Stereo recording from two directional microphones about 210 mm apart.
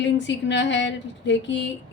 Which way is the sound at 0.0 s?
60° left (ahead or behind).